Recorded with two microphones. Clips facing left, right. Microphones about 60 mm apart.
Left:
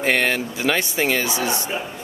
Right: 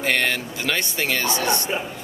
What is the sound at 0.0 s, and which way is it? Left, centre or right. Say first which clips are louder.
Speech: left 2 dB; centre.